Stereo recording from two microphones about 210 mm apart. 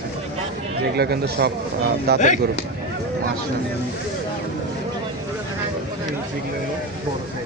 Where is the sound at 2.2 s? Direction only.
35° left (ahead or behind).